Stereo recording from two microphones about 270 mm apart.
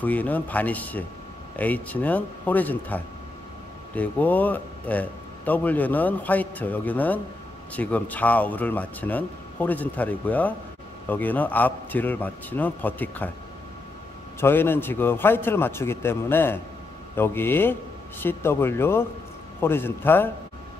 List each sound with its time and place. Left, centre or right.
0.0 s a man's voice: centre
14.4 s a man's voice: centre